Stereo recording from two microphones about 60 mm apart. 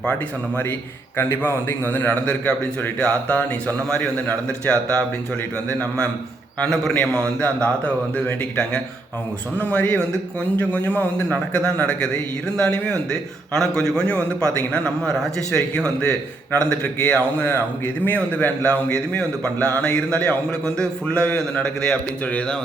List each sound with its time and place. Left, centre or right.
0.1 s a man's voice: left
3.8 s a man's voice: centre
7.2 s a man's voice: left